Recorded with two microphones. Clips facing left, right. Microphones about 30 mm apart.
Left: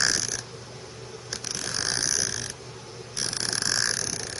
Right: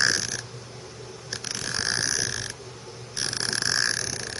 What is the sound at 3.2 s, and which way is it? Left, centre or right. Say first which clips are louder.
Burping: right 2 dB; centre.